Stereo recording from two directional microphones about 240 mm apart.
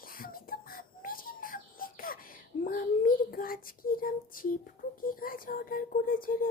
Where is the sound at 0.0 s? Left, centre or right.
Left.